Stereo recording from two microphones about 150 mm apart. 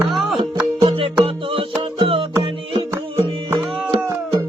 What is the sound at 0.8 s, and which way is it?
Music, 40° right (ahead or behind).